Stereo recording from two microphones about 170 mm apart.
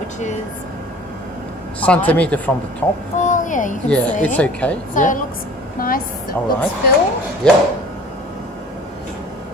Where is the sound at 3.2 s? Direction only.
50° left (ahead or behind).